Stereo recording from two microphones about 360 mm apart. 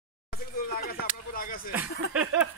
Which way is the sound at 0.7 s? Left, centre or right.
Left.